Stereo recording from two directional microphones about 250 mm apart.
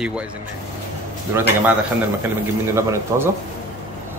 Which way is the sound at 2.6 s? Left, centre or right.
Centre.